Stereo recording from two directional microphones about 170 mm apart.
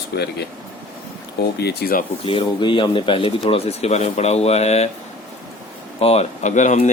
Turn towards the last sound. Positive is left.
turn(degrees=45)  # may be behind; listen again after turning